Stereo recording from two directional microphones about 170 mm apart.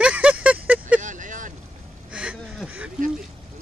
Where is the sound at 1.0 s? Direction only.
50° right (ahead or behind).